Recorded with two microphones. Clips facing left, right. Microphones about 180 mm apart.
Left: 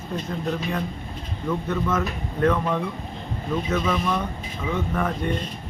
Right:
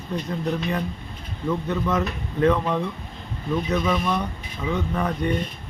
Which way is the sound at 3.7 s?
10° right (ahead or behind).